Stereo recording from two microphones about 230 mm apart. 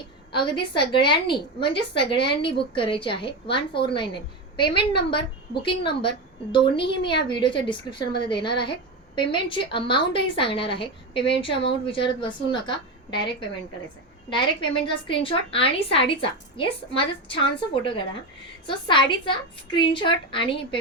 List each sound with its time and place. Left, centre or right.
0.7 s a woman's voice: left
14.3 s a woman's voice: left